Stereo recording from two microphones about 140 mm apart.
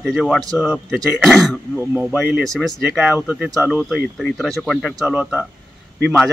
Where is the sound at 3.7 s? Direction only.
10° right (ahead or behind).